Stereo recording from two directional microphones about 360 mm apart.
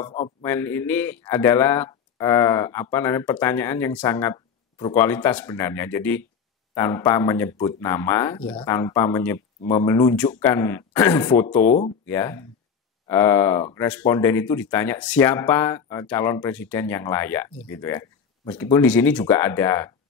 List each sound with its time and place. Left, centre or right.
0.1 s speech: centre
11.6 s speech: left
12.1 s speech: centre